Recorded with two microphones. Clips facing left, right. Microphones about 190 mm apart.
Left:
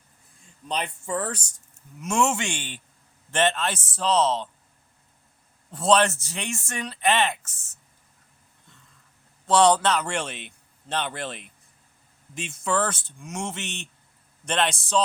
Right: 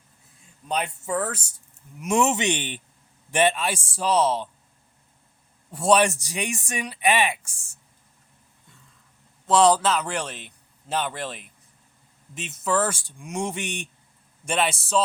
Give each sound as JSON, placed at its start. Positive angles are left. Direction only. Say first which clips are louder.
{"t": 0.7, "sound": "a man's voice", "louder": "right 2 dB", "side_deg": -5}
{"t": 2.0, "sound": "speech", "louder": "right 2 dB", "side_deg": -15}
{"t": 5.7, "sound": "speech", "louder": "right 1 dB", "side_deg": -10}
{"t": 9.5, "sound": "a man's voice", "louder": "even", "side_deg": -5}